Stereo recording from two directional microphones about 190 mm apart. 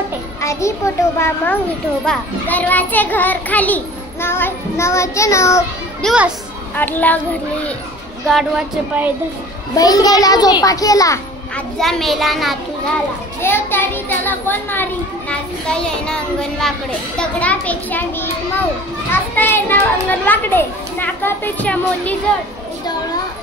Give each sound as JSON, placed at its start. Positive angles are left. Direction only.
{"t": 0.4, "sound": "a child's voice", "side_deg": 15}
{"t": 6.0, "sound": "a child's voice", "side_deg": -5}
{"t": 6.7, "sound": "a child's voice", "side_deg": 10}
{"t": 8.3, "sound": "a child's voice", "side_deg": 0}
{"t": 9.8, "sound": "a child's voice", "side_deg": 20}
{"t": 11.5, "sound": "a child's voice", "side_deg": 0}
{"t": 13.4, "sound": "a child's voice", "side_deg": 10}
{"t": 19.3, "sound": "a child's voice", "side_deg": 10}